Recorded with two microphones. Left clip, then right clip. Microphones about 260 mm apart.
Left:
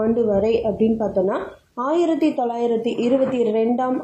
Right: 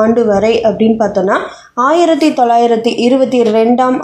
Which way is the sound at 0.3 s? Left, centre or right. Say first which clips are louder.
Right 9 dB; right.